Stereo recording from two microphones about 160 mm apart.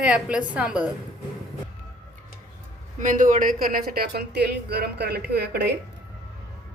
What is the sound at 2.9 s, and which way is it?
Speech, 55° right (ahead or behind).